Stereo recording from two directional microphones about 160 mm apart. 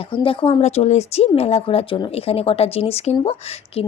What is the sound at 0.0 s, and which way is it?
Speech, 35° left (ahead or behind).